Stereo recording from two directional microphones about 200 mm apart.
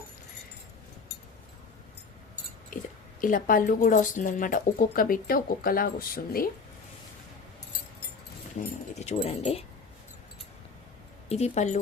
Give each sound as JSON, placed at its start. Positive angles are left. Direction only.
{"t": 2.7, "sound": "speech", "side_deg": 40}
{"t": 8.6, "sound": "speech", "side_deg": 35}
{"t": 11.3, "sound": "speech", "side_deg": 30}